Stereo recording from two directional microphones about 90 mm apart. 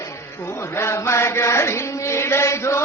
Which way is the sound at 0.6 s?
30° left (ahead or behind).